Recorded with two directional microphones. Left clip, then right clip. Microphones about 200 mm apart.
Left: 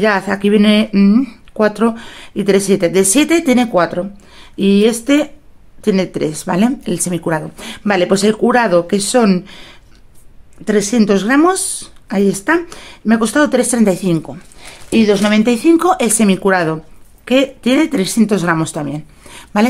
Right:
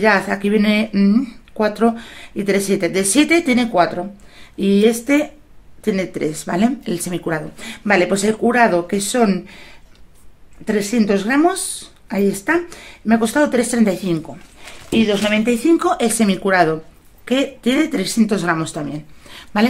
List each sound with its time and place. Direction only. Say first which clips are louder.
0.0 s speech: left 1 dB; 45° left (ahead or behind)
14.9 s speech: left 4 dB; 65° left (ahead or behind); by 19.7 s 40° left (ahead or behind)